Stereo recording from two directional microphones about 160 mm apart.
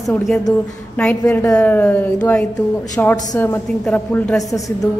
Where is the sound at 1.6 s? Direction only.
10° left (ahead or behind).